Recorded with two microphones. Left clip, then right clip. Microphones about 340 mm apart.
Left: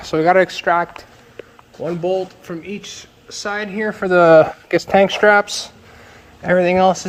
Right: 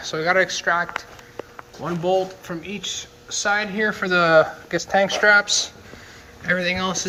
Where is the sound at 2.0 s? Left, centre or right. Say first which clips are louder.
Right 1 dB; centre.